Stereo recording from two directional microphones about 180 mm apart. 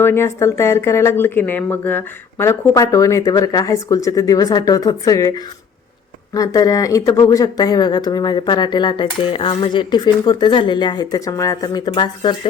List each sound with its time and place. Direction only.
0.0 s speech: 15° left (ahead or behind)
6.3 s speech: 20° left (ahead or behind)